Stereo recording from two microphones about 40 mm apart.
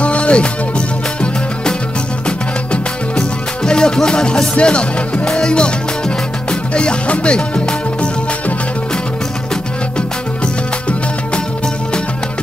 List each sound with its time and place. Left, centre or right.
0.0 s music: left
6.7 s speech: left
10.4 s music: left